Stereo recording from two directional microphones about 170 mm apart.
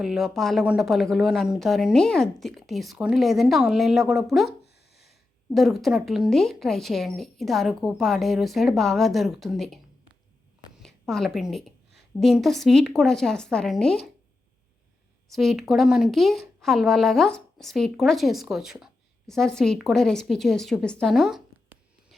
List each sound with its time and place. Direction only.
0.0 s speech: centre (ahead or behind)
4.6 s a sound: 75° left (ahead or behind)
5.5 s speech: centre (ahead or behind)
10.8 s a woman's voice: centre (ahead or behind)
15.3 s speech: centre (ahead or behind)